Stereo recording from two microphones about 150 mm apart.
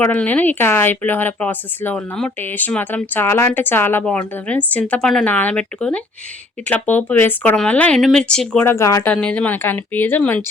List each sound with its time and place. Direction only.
0.0 s speech: 10° left (ahead or behind)
8.6 s speech: 20° left (ahead or behind)
9.1 s speech: 10° left (ahead or behind)